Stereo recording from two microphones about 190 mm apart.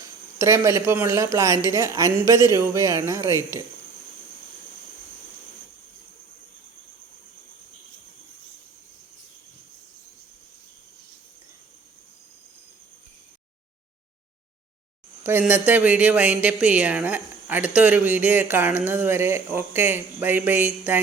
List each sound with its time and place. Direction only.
0.0 s speech: 15° right (ahead or behind)
15.2 s speech: 10° right (ahead or behind)